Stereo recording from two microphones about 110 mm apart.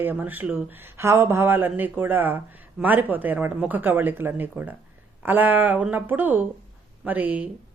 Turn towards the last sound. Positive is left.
turn(degrees=-15)  # may be behind; listen again after turning